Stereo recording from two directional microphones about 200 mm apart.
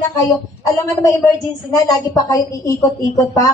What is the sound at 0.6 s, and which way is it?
A woman's voice, 15° left (ahead or behind).